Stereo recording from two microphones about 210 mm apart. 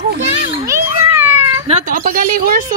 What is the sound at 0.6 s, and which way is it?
Cat, 10° right (ahead or behind).